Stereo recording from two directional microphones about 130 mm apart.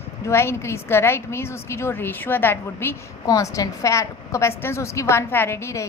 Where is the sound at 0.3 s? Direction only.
20° left (ahead or behind).